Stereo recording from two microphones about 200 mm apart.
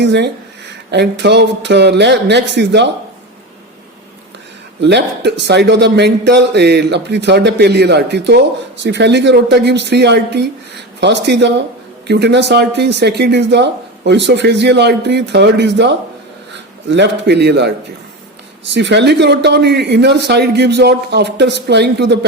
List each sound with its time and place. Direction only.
0.0 s speech: 60° right (ahead or behind)
4.8 s speech: 60° right (ahead or behind)
18.7 s speech: 60° right (ahead or behind)